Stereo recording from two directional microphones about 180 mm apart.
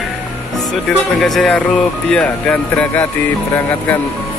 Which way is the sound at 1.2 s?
Centre (ahead or behind).